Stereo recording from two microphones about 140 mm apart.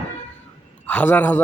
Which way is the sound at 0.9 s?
10° left (ahead or behind).